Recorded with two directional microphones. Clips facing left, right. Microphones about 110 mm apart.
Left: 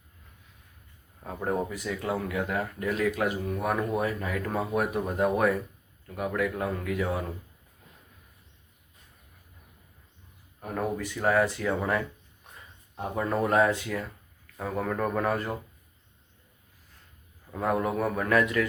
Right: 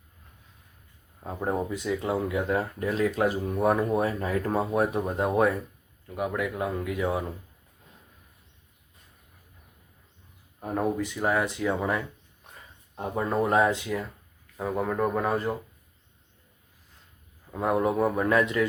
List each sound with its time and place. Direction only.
1.2 s speech: 20° right (ahead or behind)
10.6 s speech: 20° right (ahead or behind)
13.1 s speech: 20° right (ahead or behind)
17.6 s speech: 20° right (ahead or behind)